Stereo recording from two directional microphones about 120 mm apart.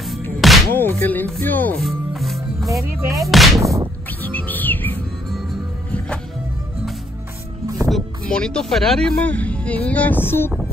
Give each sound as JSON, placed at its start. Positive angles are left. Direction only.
{"t": 0.4, "sound": "music", "side_deg": 0}
{"t": 0.7, "sound": "speech", "side_deg": 15}
{"t": 1.8, "sound": "music", "side_deg": 0}
{"t": 2.8, "sound": "music", "side_deg": -25}
{"t": 3.3, "sound": "music", "side_deg": 0}
{"t": 3.6, "sound": "music", "side_deg": -25}
{"t": 4.2, "sound": "chirp", "side_deg": 15}
{"t": 7.6, "sound": "music", "side_deg": -25}
{"t": 7.9, "sound": "speech", "side_deg": 5}